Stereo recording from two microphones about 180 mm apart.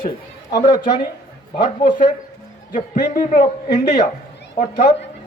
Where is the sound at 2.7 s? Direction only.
45° left (ahead or behind).